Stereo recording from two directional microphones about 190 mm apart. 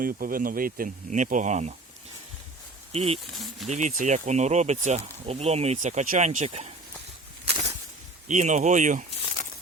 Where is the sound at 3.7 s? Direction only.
40° right (ahead or behind).